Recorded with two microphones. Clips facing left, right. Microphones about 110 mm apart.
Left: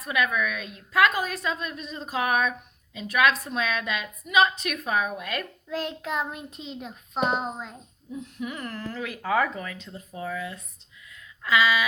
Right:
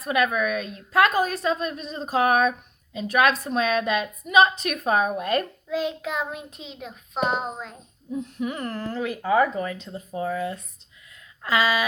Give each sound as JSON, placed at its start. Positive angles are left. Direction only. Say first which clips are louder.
{"t": 0.0, "sound": "a woman's voice", "louder": "right 4 dB", "side_deg": -35}
{"t": 5.7, "sound": "child singing", "louder": "right 3 dB", "side_deg": -10}
{"t": 8.1, "sound": "a woman's voice", "louder": "right 5 dB", "side_deg": -35}
{"t": 11.1, "sound": "a sound", "louder": "even", "side_deg": -40}